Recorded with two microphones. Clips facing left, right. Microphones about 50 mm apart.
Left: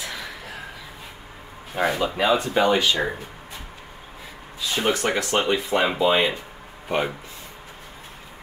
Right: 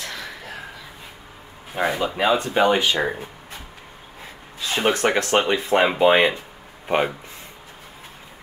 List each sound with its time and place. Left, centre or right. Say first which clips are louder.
0.0 s a sound: even; centre
1.8 s speech: even; centre
2.5 s speech: right 1 dB; centre
4.6 s speech: right 2 dB; right